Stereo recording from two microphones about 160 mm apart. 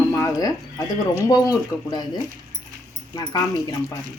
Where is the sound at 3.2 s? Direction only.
25° left (ahead or behind).